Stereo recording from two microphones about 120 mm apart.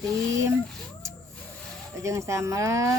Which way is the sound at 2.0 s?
25° right (ahead or behind).